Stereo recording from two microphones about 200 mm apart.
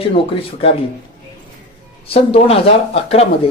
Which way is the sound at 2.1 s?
30° left (ahead or behind).